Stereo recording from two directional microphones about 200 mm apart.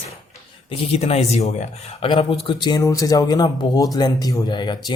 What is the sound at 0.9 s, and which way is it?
Speech, 30° left (ahead or behind).